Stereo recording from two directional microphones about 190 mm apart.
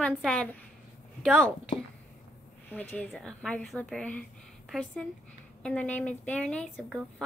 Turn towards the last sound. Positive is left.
turn(degrees=0)  # may be behind; listen again after turning